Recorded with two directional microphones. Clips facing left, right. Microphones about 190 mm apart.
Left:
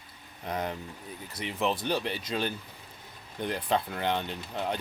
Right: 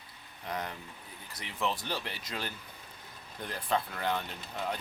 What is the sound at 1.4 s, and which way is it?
Speech, 20° left (ahead or behind).